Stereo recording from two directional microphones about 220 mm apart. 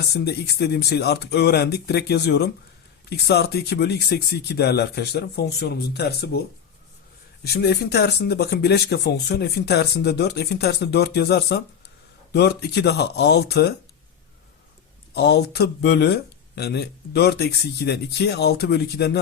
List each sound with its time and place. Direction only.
0.1 s speech: 50° left (ahead or behind)
7.4 s speech: 50° left (ahead or behind)
15.1 s speech: 50° left (ahead or behind)